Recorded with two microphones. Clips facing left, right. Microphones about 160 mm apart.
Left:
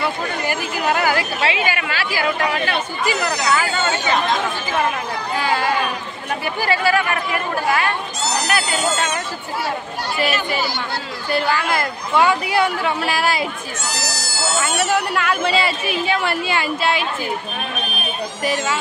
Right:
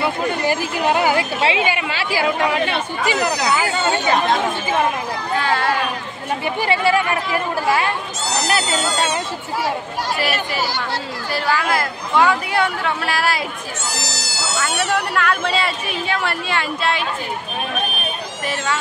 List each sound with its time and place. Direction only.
0.5 s speech: 30° right (ahead or behind)
5.4 s a sound: 5° left (ahead or behind)
6.4 s speech: 25° right (ahead or behind)
11.3 s speech: centre (ahead or behind)
14.2 s speech: 50° left (ahead or behind)
14.8 s speech: 5° left (ahead or behind)
18.4 s speech: 5° left (ahead or behind)